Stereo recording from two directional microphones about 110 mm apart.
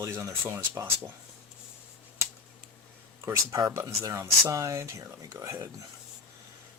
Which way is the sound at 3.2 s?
30° right (ahead or behind).